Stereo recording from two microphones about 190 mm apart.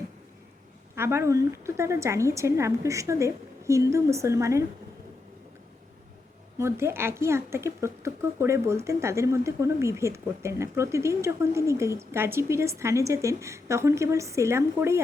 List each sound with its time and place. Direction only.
0.9 s speech: 15° right (ahead or behind)
6.6 s speech: 15° right (ahead or behind)